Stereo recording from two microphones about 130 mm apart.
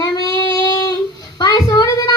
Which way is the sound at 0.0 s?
35° left (ahead or behind).